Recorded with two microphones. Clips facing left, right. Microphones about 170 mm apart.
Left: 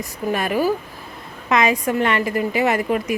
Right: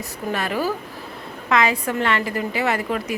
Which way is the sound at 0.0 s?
15° left (ahead or behind).